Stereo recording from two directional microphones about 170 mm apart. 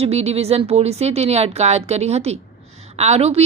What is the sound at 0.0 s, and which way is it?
A woman's voice, 40° right (ahead or behind).